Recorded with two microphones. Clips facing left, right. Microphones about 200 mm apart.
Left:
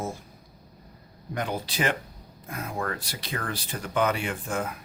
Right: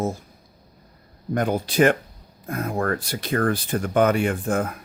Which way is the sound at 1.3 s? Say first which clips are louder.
Right 8 dB; 50° right (ahead or behind).